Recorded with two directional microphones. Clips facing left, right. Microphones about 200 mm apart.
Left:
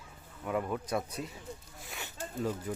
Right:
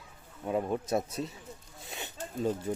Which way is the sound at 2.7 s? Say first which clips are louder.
Right 4 dB; 30° right (ahead or behind).